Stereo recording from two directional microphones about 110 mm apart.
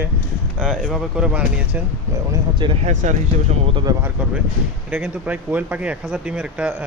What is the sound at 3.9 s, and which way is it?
Speech, 35° right (ahead or behind).